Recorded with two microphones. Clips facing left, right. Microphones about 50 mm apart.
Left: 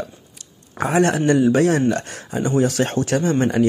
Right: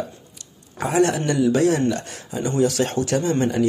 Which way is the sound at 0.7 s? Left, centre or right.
Left.